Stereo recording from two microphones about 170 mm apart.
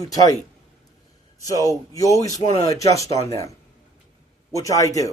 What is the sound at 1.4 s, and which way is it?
Speech, 20° left (ahead or behind).